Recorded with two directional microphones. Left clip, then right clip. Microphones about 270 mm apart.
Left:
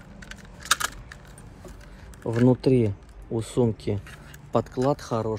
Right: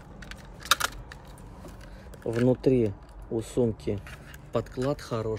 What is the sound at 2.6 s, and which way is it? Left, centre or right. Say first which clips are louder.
Speech: left 2 dB; left.